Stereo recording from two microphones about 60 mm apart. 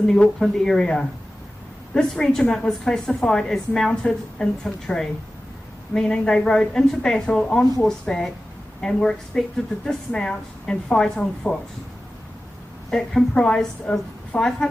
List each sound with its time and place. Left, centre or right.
0.3 s a woman's voice: centre
11.4 s speech: left
12.9 s a woman's voice: centre